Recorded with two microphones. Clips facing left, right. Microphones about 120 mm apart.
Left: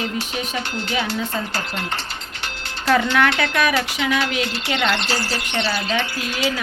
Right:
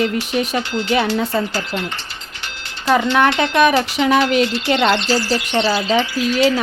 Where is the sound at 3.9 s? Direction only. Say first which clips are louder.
Right 7 dB; 50° right (ahead or behind).